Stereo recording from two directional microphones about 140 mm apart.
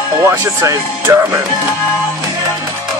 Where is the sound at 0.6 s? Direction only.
20° right (ahead or behind).